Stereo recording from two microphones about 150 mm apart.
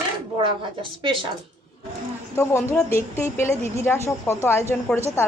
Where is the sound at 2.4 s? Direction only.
15° left (ahead or behind).